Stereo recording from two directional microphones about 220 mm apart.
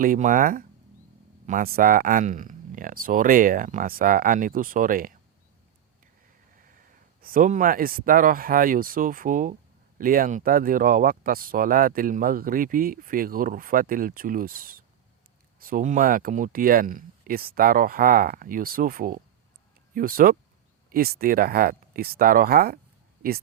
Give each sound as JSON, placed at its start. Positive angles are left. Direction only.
{"t": 0.0, "sound": "speech", "side_deg": -40}
{"t": 7.2, "sound": "speech", "side_deg": -40}